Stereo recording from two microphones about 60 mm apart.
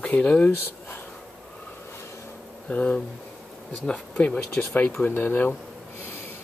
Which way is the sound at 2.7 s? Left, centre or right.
Left.